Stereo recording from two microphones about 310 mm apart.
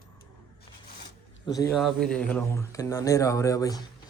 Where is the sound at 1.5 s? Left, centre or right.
Centre.